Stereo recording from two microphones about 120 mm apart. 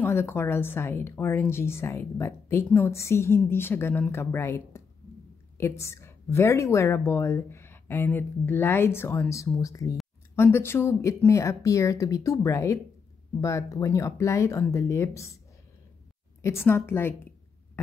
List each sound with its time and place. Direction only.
0.0 s speech: 20° left (ahead or behind)
16.4 s speech: 20° left (ahead or behind)